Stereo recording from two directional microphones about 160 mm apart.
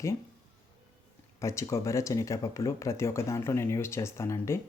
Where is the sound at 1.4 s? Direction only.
20° left (ahead or behind).